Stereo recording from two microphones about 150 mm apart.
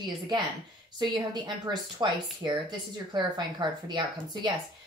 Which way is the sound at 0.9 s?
30° right (ahead or behind).